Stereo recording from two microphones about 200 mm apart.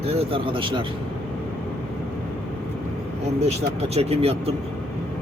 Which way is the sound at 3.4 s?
30° right (ahead or behind).